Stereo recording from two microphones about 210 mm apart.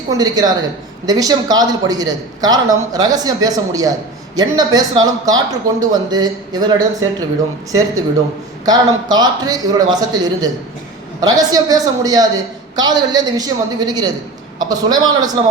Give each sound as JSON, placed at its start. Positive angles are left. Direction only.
{"t": 0.1, "sound": "speech", "side_deg": -20}